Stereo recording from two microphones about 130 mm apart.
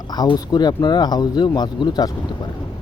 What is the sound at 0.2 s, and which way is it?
Speech, 30° left (ahead or behind).